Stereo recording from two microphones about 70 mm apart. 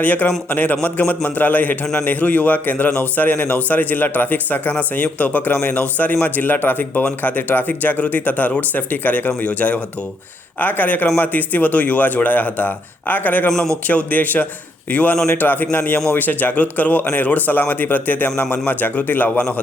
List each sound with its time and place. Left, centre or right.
0.0 s speech: left